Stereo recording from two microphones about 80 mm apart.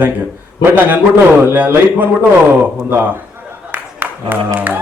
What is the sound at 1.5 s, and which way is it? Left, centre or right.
Speech, right.